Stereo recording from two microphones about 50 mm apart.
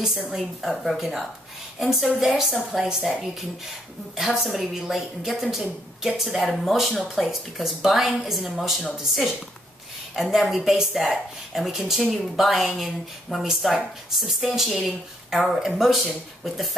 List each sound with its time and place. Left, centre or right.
0.0 s a woman's voice: centre
7.2 s a woman's voice: centre
10.1 s a woman's voice: centre